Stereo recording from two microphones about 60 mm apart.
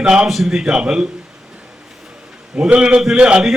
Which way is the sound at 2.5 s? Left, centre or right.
Centre.